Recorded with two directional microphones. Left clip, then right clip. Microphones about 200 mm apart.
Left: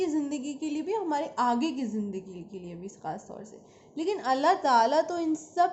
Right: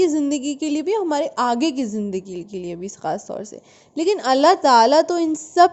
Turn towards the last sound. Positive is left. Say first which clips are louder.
# right 11 dB
turn(degrees=-45)  # may be behind; listen again after turning